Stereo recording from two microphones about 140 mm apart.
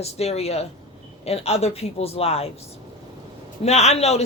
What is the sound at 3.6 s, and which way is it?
Speech, 50° left (ahead or behind).